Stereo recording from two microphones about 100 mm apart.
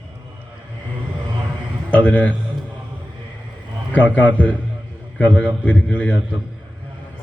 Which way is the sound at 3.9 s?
15° left (ahead or behind).